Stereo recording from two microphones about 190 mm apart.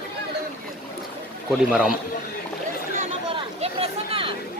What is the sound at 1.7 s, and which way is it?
Speech, 5° right (ahead or behind).